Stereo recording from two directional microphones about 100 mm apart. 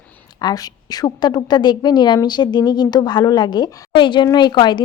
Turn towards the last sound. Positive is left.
turn(degrees=50)  # may be behind; listen again after turning